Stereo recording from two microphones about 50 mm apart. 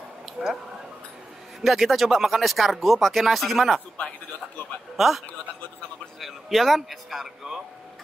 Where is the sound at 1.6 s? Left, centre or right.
Centre.